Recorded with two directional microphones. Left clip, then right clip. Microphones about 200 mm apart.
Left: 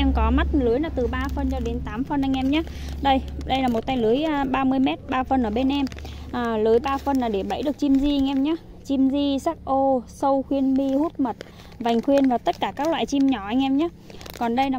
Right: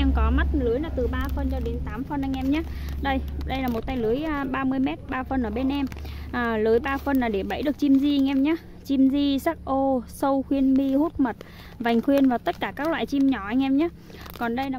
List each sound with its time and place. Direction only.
0.0 s a sound: 15° left (ahead or behind)
0.6 s speech: 35° left (ahead or behind)
2.5 s a woman's voice: 20° left (ahead or behind)
6.3 s speech: 5° left (ahead or behind)
14.4 s a woman's voice: 20° left (ahead or behind)